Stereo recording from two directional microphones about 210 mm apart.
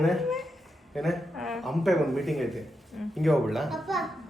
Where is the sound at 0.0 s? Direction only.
Centre (ahead or behind).